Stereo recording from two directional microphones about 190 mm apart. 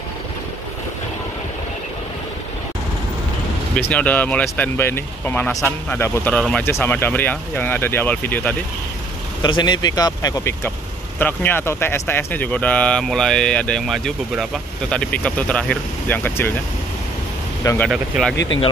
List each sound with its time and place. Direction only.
3.7 s speech: 5° left (ahead or behind)
9.4 s speech: 20° left (ahead or behind)
17.8 s speech: 5° right (ahead or behind)
18.3 s speech: 65° left (ahead or behind)